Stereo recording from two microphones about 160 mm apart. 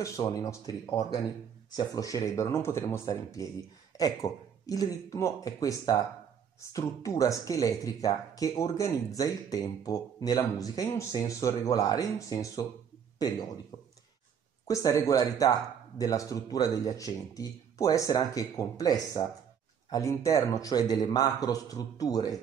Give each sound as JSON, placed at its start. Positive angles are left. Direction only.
{"t": 0.0, "sound": "speech", "side_deg": 20}
{"t": 14.7, "sound": "speech", "side_deg": 20}